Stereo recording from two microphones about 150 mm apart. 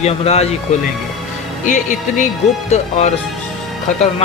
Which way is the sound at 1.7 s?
55° left (ahead or behind).